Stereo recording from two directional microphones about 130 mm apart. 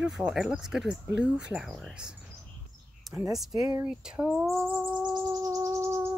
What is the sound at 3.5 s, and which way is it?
Speech, 25° right (ahead or behind).